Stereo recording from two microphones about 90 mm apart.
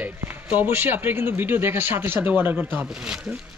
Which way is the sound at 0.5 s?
20° right (ahead or behind).